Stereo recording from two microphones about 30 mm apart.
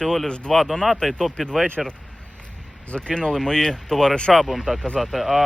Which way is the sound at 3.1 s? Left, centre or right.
Left.